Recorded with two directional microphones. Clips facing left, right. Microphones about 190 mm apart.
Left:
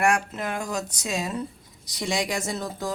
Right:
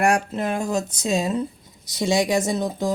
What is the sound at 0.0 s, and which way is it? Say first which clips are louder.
Speech: right 3 dB; 35° right (ahead or behind).